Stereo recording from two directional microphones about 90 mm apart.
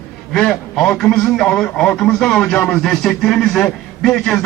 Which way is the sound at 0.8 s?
5° left (ahead or behind).